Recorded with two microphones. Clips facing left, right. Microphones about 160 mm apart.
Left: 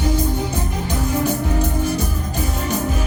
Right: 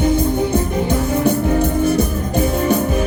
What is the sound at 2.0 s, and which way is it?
Music, 55° right (ahead or behind).